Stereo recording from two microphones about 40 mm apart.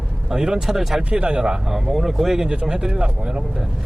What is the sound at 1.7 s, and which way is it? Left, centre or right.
Speech, centre.